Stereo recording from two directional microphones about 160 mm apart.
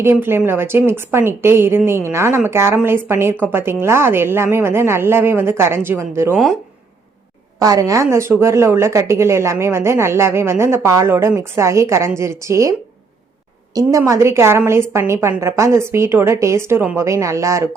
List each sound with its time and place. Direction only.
0.0 s a woman's voice: 15° right (ahead or behind)
6.3 s speech: centre (ahead or behind)
7.6 s a woman's voice: 20° right (ahead or behind)
13.7 s a woman's voice: 20° right (ahead or behind)